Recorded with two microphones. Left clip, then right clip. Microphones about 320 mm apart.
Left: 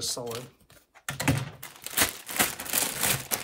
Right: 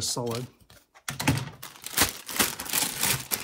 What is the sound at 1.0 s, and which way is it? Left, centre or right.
Crumpling, centre.